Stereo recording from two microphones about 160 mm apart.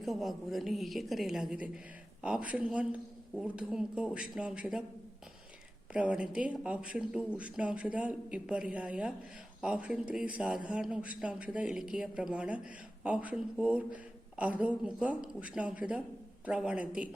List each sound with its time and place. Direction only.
0.0 s a woman's voice: centre (ahead or behind)
5.9 s speech: 5° right (ahead or behind)